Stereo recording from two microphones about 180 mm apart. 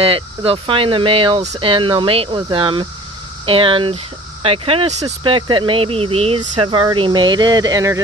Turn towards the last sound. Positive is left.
turn(degrees=-20)  # may be behind; listen again after turning